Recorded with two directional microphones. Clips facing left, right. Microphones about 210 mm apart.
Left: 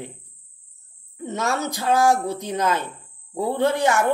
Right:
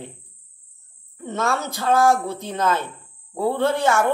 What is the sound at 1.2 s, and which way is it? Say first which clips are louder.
Speech: even; 15° left (ahead or behind).